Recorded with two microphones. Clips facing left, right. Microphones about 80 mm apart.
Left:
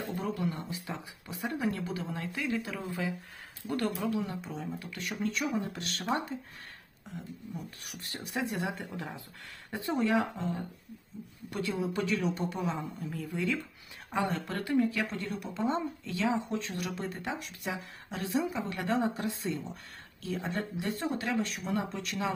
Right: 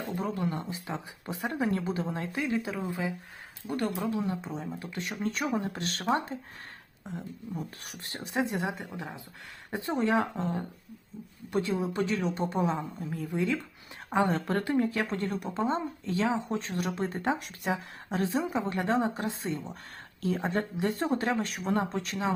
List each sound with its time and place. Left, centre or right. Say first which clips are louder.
0.2 s a woman's voice: right 2 dB; right
5.3 s a woman's voice: right 2 dB; right
7.9 s a woman's voice: right 2 dB; right
14.1 s a woman's voice: right 5 dB; right